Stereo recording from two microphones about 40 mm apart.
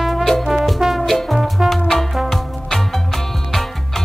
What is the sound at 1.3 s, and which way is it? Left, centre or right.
Music, centre.